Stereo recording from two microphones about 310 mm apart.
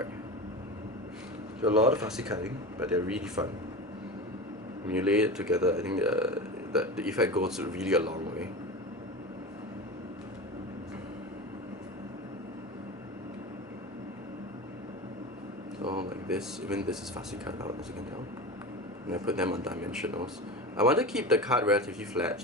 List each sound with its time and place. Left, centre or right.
1.6 s speech: centre
4.9 s speech: centre
15.8 s a sound: right
16.3 s speech: centre
19.1 s speech: centre